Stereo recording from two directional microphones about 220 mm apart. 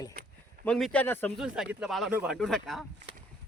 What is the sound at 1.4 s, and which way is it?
Speech, centre (ahead or behind).